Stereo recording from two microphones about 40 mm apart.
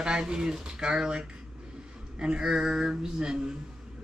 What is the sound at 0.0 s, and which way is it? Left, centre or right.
A woman's voice, centre.